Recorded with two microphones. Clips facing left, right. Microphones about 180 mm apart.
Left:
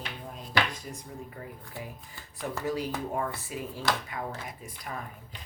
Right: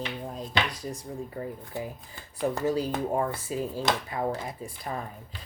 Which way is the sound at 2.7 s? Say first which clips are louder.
Right 4 dB; 30° right (ahead or behind).